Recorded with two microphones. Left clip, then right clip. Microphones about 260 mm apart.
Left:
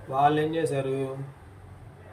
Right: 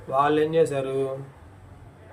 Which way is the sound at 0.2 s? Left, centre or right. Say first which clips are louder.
Right 3 dB; centre.